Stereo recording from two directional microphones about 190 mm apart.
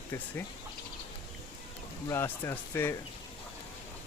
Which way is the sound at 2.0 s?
10° left (ahead or behind).